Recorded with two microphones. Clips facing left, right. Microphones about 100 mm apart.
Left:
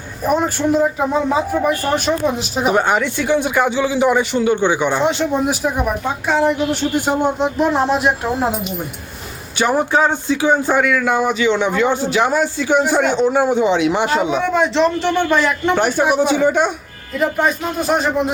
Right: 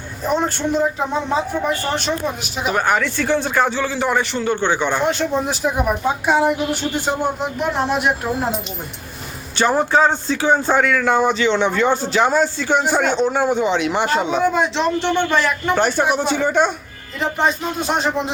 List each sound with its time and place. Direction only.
0.3 s speech: 10° left (ahead or behind)
2.7 s a man's voice: 20° left (ahead or behind)
5.6 s speech: centre (ahead or behind)
6.1 s a woman's voice: 15° right (ahead or behind)
6.9 s a man's voice: 15° left (ahead or behind)
7.3 s speech: 30° left (ahead or behind)
9.6 s a man's voice: 10° left (ahead or behind)
14.4 s a man's voice: centre (ahead or behind)